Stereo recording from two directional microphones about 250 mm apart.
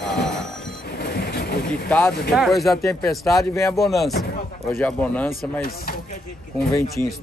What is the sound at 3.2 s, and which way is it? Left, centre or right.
Speech, centre.